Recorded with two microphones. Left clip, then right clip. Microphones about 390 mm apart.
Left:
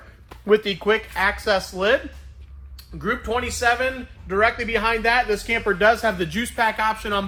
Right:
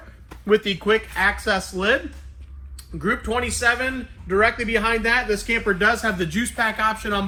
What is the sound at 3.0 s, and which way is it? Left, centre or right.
A man's voice, centre.